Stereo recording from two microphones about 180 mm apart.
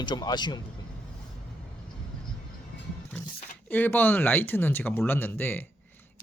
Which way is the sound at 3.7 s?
10° left (ahead or behind).